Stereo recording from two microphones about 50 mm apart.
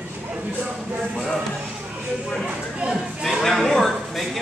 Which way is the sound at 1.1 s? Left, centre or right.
Centre.